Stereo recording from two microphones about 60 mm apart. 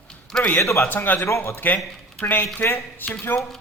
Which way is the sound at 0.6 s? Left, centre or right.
Left.